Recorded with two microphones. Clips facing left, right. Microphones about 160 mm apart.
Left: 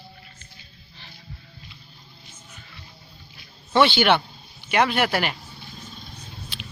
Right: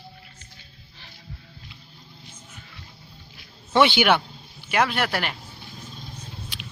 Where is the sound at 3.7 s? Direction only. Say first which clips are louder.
Even; 15° right (ahead or behind); by 5.3 s centre (ahead or behind).